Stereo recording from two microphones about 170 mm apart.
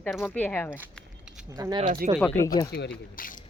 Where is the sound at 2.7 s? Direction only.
70° left (ahead or behind).